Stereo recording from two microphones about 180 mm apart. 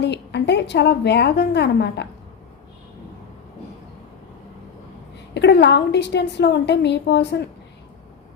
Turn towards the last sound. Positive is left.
turn(degrees=70)  # may be behind; listen again after turning